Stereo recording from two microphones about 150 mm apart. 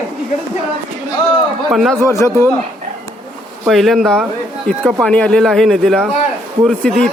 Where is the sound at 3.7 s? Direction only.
Centre (ahead or behind).